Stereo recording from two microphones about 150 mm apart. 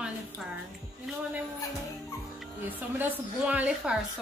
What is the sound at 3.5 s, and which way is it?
Speech, 10° right (ahead or behind).